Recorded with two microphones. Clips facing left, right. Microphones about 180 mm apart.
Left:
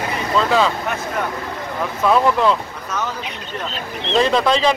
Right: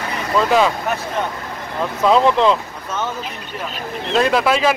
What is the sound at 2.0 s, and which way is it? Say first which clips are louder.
Speech: right 2 dB; 20° right (ahead or behind).